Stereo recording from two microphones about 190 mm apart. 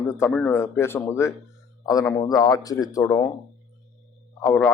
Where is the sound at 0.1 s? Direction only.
10° left (ahead or behind).